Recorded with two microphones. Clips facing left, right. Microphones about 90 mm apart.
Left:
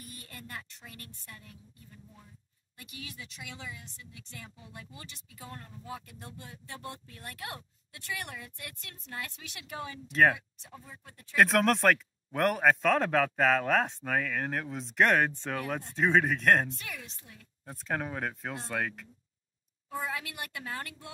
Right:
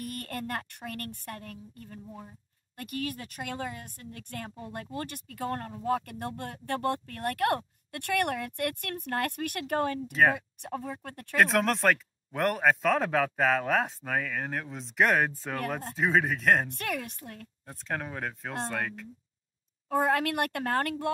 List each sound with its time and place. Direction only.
0.0 s speech: 60° right (ahead or behind)
11.3 s speech: centre (ahead or behind)
16.7 s speech: 60° right (ahead or behind)
17.6 s speech: 5° left (ahead or behind)
19.9 s speech: 55° right (ahead or behind)